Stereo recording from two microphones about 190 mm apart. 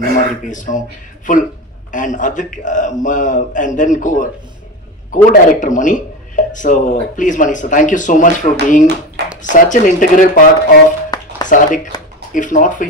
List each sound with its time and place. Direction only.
0.4 s speech: 40° left (ahead or behind)
1.9 s speech: 40° left (ahead or behind)
11.1 s a sound: 20° left (ahead or behind)
11.4 s speech: 45° left (ahead or behind)